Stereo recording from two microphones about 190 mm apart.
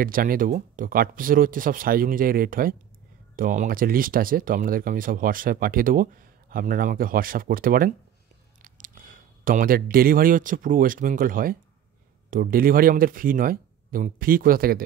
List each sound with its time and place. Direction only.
0.0 s speech: 50° right (ahead or behind)